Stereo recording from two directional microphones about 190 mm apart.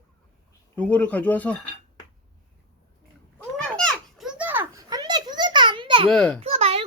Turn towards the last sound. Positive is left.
turn(degrees=-30)  # may be behind; listen again after turning